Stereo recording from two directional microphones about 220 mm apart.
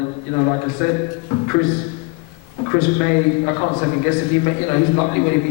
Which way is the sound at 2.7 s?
20° left (ahead or behind).